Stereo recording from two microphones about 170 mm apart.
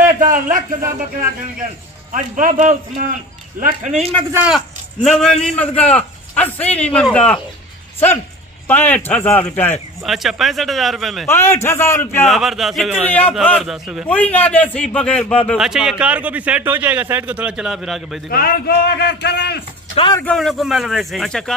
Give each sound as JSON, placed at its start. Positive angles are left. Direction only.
{"t": 0.0, "sound": "a sound", "side_deg": -50}
{"t": 2.1, "sound": "speech", "side_deg": -50}
{"t": 4.3, "sound": "speech", "side_deg": -10}
{"t": 4.6, "sound": "speech", "side_deg": 0}
{"t": 8.6, "sound": "speech", "side_deg": 10}
{"t": 10.0, "sound": "a man's voice", "side_deg": 0}
{"t": 11.2, "sound": "speech", "side_deg": 15}
{"t": 12.3, "sound": "a man's voice", "side_deg": 0}
{"t": 14.1, "sound": "a man's voice", "side_deg": 10}
{"t": 18.3, "sound": "a man's voice", "side_deg": 65}
{"t": 20.3, "sound": "a man's voice", "side_deg": 0}